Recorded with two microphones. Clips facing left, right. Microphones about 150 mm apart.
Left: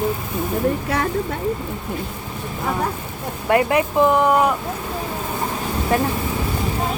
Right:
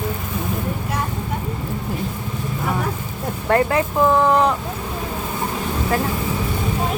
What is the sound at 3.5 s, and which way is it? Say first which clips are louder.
Speech: left 1 dB; 15° left (ahead or behind).